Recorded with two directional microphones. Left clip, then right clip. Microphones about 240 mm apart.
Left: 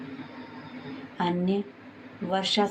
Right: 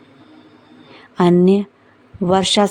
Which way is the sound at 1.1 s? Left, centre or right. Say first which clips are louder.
Right 14 dB; right.